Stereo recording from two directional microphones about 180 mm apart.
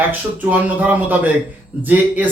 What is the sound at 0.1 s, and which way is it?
A man's voice, 10° right (ahead or behind).